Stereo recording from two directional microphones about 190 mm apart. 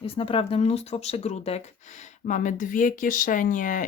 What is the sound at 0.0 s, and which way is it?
Speech, 30° left (ahead or behind).